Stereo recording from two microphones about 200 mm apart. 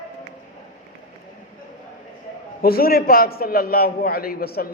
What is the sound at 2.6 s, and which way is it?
A man's voice, 50° left (ahead or behind).